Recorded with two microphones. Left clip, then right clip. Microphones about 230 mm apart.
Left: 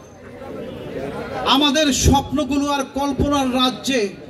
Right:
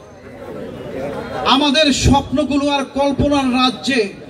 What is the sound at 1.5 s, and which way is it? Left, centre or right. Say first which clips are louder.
A man's voice: right 3 dB; right.